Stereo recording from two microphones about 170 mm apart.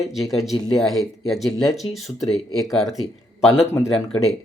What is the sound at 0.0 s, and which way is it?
Speech, centre (ahead or behind).